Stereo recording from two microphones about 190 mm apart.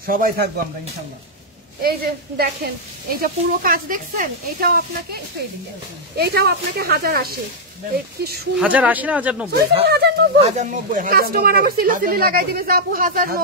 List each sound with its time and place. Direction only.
0.0 s a woman's voice: 50° right (ahead or behind)
1.8 s a woman's voice: 55° right (ahead or behind)
8.5 s speech: 5° right (ahead or behind)
9.8 s speech: 60° right (ahead or behind)
10.4 s a woman's voice: 40° right (ahead or behind)